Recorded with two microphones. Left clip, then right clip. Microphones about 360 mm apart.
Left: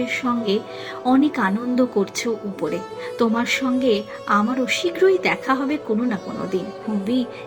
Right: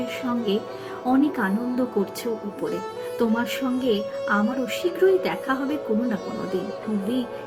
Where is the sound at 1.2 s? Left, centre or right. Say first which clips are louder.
Left 3 dB; centre.